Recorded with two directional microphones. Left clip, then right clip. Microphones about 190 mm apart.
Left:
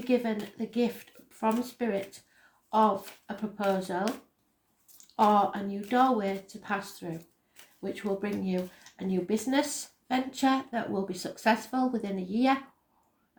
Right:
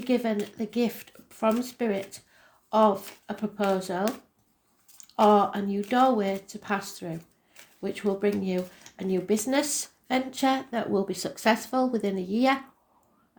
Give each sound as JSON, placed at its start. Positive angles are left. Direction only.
{"t": 0.1, "sound": "speech", "side_deg": -45}